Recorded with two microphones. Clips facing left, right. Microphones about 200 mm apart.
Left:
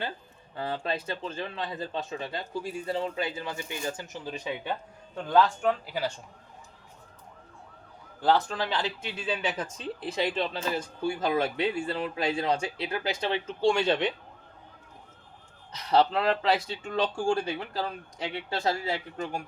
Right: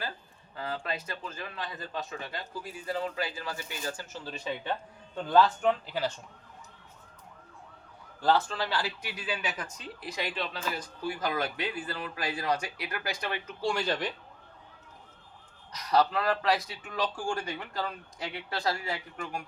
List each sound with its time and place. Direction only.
0.5 s speech: 30° left (ahead or behind); by 5.7 s centre (ahead or behind)
5.8 s speech: 10° left (ahead or behind)
8.3 s speech: 15° left (ahead or behind)
15.7 s speech: 25° left (ahead or behind)